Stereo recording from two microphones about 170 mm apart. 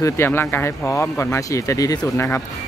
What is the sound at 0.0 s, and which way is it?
Speech, 15° left (ahead or behind).